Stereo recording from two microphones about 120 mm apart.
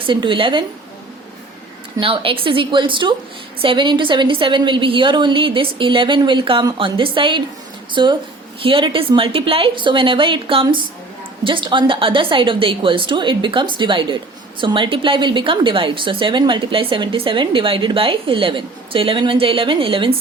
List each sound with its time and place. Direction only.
0.0 s a woman's voice: 45° right (ahead or behind)
2.0 s a woman's voice: 45° right (ahead or behind)